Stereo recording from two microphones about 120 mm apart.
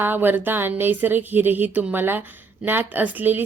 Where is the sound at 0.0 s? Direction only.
15° right (ahead or behind).